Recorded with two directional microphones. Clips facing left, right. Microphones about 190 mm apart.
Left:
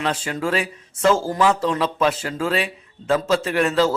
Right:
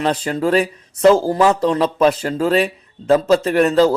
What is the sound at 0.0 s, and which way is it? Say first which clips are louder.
Speech: right 5 dB; 40° right (ahead or behind).